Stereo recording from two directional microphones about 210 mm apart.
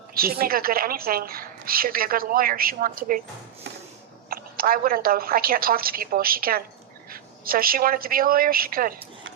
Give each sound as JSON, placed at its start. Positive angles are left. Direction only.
{"t": 0.1, "sound": "a woman's voice", "side_deg": -45}
{"t": 4.3, "sound": "a woman's voice", "side_deg": -45}